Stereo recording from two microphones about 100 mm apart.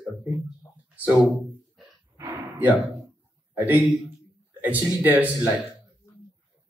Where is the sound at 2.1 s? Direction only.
20° right (ahead or behind).